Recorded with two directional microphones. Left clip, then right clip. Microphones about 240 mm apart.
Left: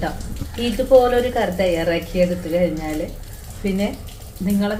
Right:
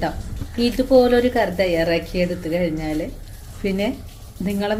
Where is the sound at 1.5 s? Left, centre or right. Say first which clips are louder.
Even; right.